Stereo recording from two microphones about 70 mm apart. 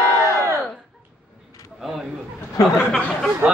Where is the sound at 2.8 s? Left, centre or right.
Centre.